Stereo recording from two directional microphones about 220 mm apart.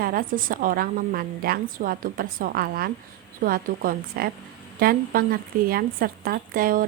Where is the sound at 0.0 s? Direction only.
40° right (ahead or behind).